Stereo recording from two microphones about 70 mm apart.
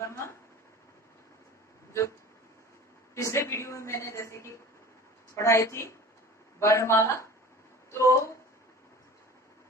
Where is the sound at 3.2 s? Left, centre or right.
Left.